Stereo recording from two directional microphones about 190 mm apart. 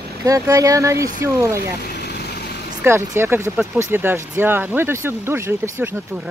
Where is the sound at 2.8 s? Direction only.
15° right (ahead or behind).